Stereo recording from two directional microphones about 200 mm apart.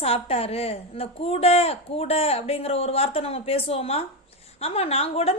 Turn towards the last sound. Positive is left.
turn(degrees=30)  # may be behind; listen again after turning